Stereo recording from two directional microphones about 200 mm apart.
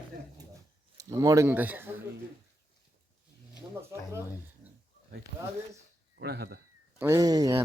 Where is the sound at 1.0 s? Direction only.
15° right (ahead or behind).